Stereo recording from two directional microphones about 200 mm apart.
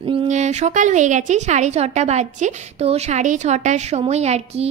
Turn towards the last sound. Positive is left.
turn(degrees=-35)  # may be behind; listen again after turning